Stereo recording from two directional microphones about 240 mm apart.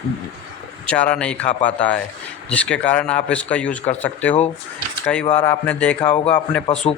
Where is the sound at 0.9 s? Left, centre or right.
Centre.